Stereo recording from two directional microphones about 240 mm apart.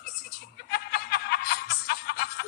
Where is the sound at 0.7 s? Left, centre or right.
Left.